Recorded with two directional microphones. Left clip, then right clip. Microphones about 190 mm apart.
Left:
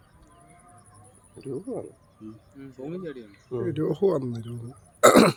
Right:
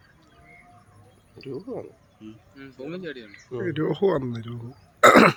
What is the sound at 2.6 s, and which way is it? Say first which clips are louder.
Speech: right 1 dB; 60° left (ahead or behind).